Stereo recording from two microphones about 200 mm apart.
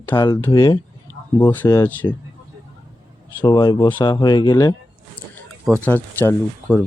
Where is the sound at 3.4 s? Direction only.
20° left (ahead or behind).